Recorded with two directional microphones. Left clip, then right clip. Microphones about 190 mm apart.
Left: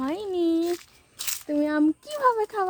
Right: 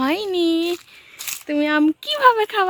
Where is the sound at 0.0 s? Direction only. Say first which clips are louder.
Right 7 dB; 20° right (ahead or behind).